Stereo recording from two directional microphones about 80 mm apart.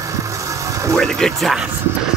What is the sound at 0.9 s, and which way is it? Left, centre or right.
Speech, centre.